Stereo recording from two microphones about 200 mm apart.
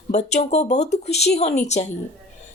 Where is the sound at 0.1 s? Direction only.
35° left (ahead or behind).